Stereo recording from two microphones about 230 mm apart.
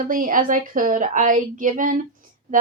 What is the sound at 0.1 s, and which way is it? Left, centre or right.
A woman's voice, right.